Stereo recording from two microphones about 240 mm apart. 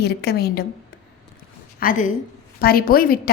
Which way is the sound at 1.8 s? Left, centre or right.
Left.